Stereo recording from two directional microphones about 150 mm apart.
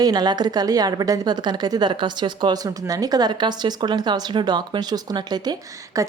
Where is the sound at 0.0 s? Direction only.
25° right (ahead or behind).